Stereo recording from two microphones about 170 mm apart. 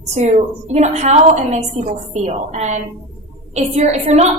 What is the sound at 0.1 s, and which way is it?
A woman's voice, 40° right (ahead or behind).